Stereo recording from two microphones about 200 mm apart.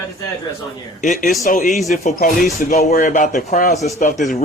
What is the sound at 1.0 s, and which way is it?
A man's voice, 40° left (ahead or behind).